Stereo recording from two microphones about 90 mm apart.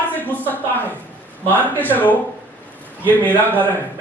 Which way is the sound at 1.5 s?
20° left (ahead or behind).